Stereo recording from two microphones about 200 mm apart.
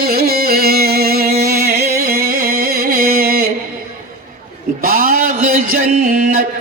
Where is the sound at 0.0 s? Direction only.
50° right (ahead or behind).